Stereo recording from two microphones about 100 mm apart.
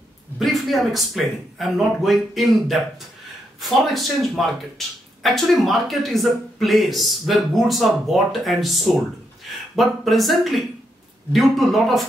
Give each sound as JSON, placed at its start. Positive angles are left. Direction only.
{"t": 0.4, "sound": "speech", "side_deg": 0}